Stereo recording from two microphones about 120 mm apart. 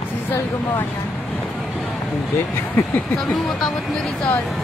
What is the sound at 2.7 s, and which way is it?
Speech, 15° left (ahead or behind).